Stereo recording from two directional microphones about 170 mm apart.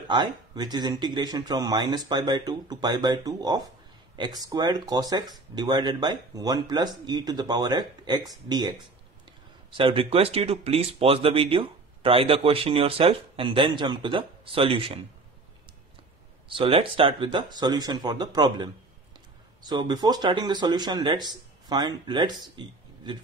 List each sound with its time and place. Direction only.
0.1 s speech: 25° right (ahead or behind)
16.4 s speech: 30° right (ahead or behind)